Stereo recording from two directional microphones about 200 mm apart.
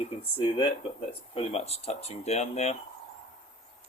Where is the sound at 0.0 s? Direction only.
25° left (ahead or behind).